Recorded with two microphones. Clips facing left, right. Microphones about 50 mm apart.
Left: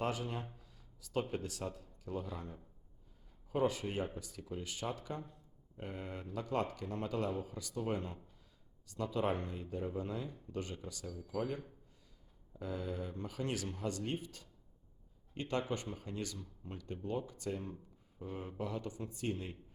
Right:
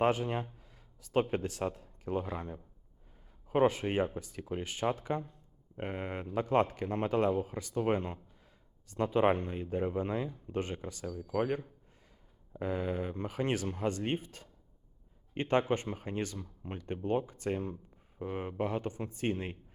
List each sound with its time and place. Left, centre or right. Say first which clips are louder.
0.0 s speech: right 8 dB; right